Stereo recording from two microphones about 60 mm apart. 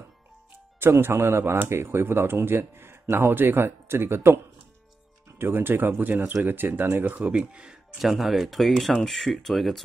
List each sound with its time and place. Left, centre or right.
0.7 s speech: right
5.4 s speech: right
7.2 s speech: centre
8.0 s speech: centre